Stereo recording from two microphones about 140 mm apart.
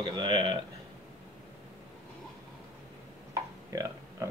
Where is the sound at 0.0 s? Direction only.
30° right (ahead or behind).